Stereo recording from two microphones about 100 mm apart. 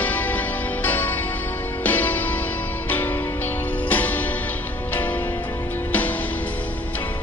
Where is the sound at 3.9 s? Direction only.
20° left (ahead or behind).